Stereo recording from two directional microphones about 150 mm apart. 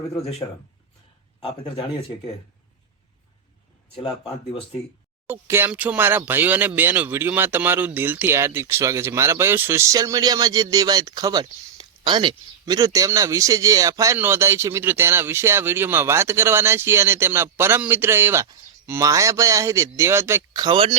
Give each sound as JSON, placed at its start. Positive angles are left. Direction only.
{"t": 1.4, "sound": "speech", "side_deg": 35}
{"t": 5.3, "sound": "speech", "side_deg": -15}
{"t": 20.7, "sound": "speech", "side_deg": -35}